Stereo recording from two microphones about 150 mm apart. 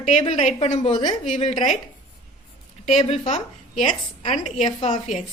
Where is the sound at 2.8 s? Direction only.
50° left (ahead or behind).